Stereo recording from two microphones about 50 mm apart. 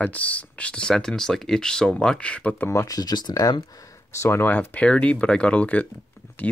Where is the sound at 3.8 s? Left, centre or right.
Left.